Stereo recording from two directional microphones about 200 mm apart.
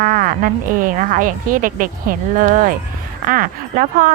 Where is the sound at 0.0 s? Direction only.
45° right (ahead or behind).